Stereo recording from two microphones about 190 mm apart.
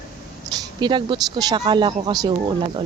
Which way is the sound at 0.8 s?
25° right (ahead or behind).